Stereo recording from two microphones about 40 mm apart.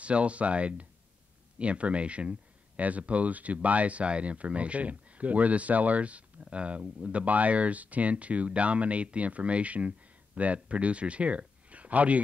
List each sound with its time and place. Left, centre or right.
0.0 s speech: right